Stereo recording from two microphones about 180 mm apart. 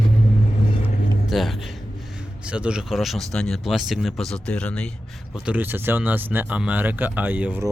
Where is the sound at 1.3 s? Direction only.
Centre (ahead or behind).